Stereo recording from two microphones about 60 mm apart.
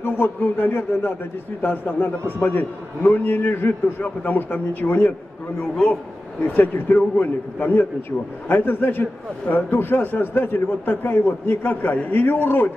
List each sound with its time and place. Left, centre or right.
0.0 s a man's voice: left